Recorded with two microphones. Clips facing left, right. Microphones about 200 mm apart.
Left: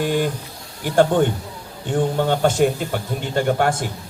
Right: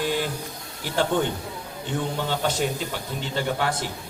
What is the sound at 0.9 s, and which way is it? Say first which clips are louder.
Speech: left 7 dB; 50° left (ahead or behind).